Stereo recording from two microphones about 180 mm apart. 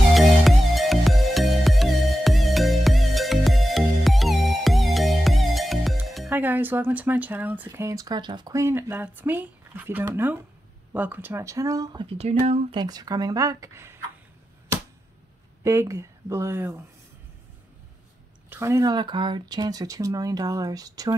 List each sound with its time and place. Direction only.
0.1 s music: centre (ahead or behind)
10.9 s speech: 10° right (ahead or behind); by 12.6 s 35° right (ahead or behind)
12.7 s speech: 20° right (ahead or behind)
15.6 s speech: 15° right (ahead or behind)
18.5 s speech: 15° right (ahead or behind)